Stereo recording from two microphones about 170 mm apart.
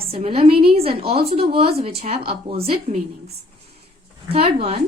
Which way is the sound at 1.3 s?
35° right (ahead or behind).